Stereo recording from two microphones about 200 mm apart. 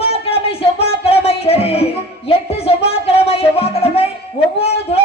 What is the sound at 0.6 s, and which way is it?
Music, 30° left (ahead or behind).